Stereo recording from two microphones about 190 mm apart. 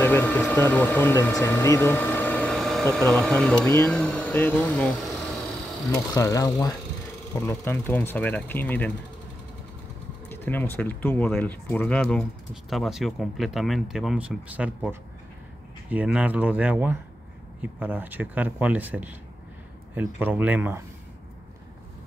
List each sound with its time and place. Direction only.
0.0 s speech: 10° left (ahead or behind)
6.1 s speech: 15° left (ahead or behind)
10.3 s speech: 10° left (ahead or behind); by 20.8 s 10° right (ahead or behind)